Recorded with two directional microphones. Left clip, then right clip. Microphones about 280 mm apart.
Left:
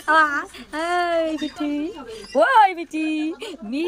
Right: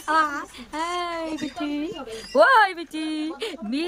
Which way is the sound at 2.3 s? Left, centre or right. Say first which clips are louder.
Left 1 dB; centre.